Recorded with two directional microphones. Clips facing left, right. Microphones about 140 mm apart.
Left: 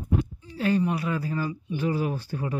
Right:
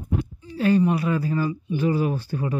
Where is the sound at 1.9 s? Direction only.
90° right.